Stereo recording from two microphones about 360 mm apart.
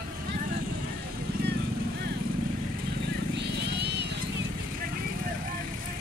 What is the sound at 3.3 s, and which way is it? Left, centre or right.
Vehicle, right.